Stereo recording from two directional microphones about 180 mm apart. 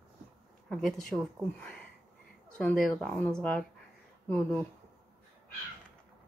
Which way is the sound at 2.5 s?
5° left (ahead or behind).